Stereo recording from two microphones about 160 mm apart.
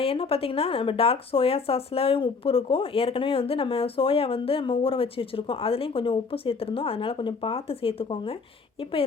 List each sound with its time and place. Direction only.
0.0 s speech: 35° left (ahead or behind)